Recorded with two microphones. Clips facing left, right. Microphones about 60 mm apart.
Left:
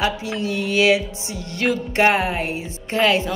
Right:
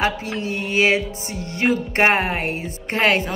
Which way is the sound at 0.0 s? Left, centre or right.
Right.